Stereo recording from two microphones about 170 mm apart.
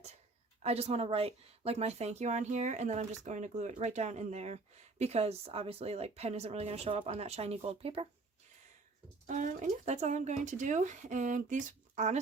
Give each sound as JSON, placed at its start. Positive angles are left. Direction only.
{"t": 0.6, "sound": "speech", "side_deg": -40}
{"t": 9.2, "sound": "speech", "side_deg": -45}